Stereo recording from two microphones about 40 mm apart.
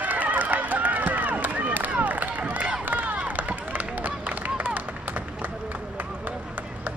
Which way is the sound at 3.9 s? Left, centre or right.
Right.